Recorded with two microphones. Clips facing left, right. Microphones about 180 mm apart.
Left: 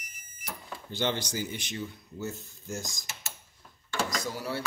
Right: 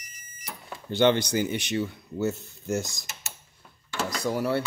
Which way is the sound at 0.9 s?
65° right (ahead or behind).